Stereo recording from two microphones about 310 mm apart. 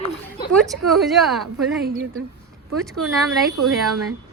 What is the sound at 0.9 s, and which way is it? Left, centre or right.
Speech, centre.